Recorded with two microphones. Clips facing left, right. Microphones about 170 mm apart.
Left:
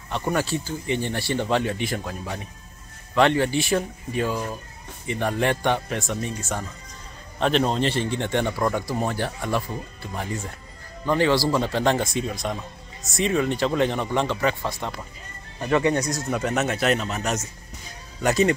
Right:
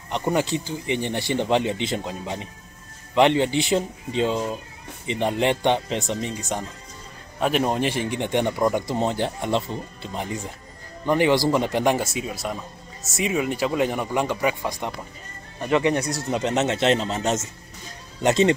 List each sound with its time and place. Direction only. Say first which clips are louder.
0.1 s speech: right 2 dB; 20° right (ahead or behind)
16.3 s speech: right 4 dB; 20° right (ahead or behind)